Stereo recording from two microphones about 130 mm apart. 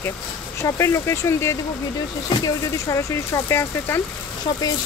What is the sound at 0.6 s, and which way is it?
Speech, 20° left (ahead or behind).